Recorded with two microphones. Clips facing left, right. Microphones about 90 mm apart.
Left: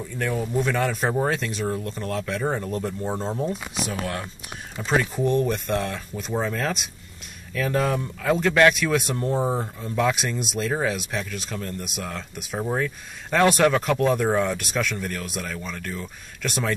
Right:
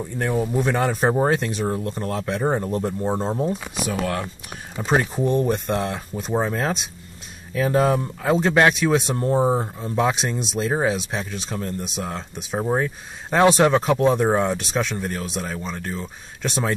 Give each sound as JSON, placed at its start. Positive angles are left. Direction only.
{"t": 0.0, "sound": "speech", "side_deg": -30}
{"t": 1.7, "sound": "speech", "side_deg": -25}
{"t": 4.7, "sound": "speech", "side_deg": -35}
{"t": 10.1, "sound": "speech", "side_deg": -30}